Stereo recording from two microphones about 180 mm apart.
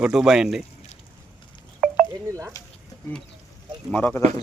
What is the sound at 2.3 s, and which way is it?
Speech, 15° right (ahead or behind).